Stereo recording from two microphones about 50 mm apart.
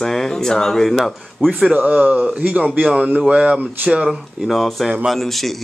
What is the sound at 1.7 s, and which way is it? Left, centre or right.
Speech, right.